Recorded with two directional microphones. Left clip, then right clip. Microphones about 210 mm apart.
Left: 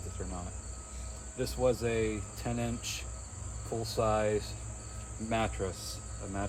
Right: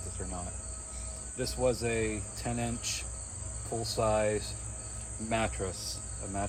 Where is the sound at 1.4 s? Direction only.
15° left (ahead or behind).